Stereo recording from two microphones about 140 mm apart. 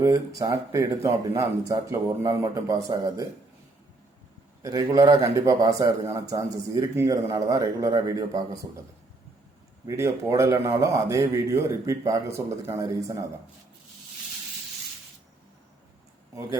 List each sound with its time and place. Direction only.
0.0 s a man's voice: 25° right (ahead or behind)
4.6 s a man's voice: 25° right (ahead or behind)
9.8 s a man's voice: 20° right (ahead or behind)